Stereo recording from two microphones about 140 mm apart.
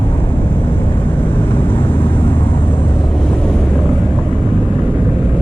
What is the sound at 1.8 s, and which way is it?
Vehicle, 35° left (ahead or behind).